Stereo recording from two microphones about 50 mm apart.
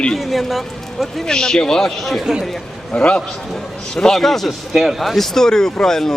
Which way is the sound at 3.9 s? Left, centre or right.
Centre.